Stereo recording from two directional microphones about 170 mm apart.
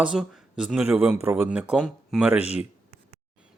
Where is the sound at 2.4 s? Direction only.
40° left (ahead or behind).